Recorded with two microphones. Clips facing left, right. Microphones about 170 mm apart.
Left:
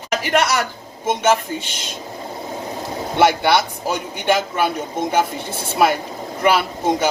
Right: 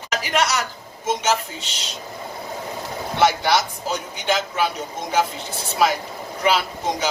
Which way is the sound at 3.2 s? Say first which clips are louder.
Left 3 dB; 55° left (ahead or behind).